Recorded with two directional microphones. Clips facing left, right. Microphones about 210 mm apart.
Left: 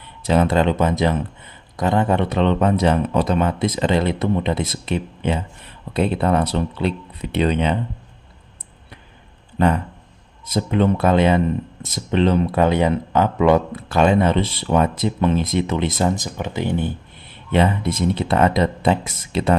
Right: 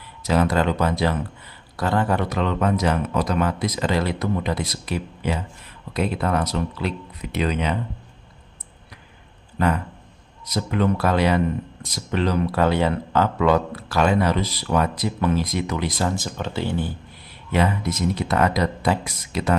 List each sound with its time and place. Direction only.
0.3 s speech: 25° left (ahead or behind)
10.5 s speech: 25° left (ahead or behind)